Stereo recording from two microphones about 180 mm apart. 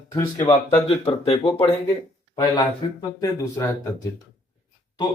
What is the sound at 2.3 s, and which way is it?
Speech, 20° left (ahead or behind).